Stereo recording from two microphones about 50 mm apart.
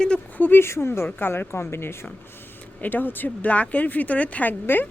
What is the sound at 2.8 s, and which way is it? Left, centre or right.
A woman's voice, left.